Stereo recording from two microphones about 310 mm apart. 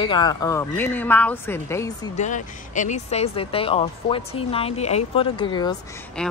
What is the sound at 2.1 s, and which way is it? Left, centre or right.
Speech, left.